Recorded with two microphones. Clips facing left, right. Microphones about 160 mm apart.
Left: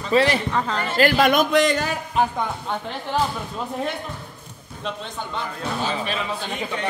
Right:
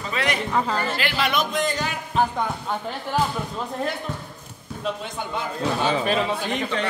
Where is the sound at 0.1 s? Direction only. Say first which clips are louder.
Left 8 dB; 30° left (ahead or behind).